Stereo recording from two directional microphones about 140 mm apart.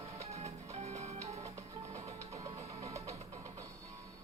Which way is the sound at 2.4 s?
25° right (ahead or behind).